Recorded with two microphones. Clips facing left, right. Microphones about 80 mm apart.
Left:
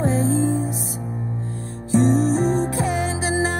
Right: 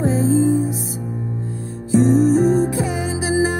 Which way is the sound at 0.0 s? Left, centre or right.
Centre.